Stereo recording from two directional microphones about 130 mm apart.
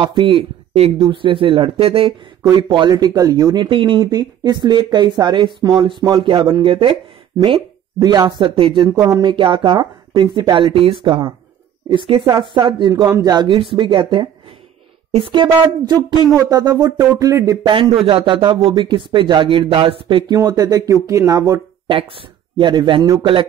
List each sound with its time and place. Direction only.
0.0 s speech: 40° right (ahead or behind)
0.9 s speech: 35° right (ahead or behind)
17.6 s speech: 40° right (ahead or behind)
20.3 s speech: 25° right (ahead or behind)
21.8 s speech: 40° right (ahead or behind)